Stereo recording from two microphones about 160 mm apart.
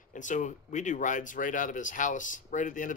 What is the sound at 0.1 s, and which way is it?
Speech, 50° left (ahead or behind).